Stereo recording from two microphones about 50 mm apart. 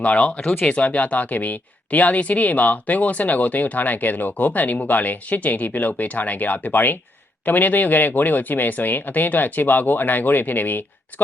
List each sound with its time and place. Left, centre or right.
0.0 s speech: left